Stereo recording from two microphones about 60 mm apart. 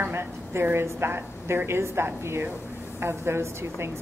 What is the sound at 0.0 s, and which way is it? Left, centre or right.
A woman's voice, right.